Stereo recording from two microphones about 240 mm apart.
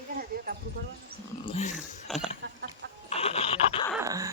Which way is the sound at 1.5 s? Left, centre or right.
Left.